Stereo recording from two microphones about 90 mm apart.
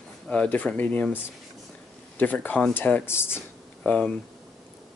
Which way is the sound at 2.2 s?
20° left (ahead or behind).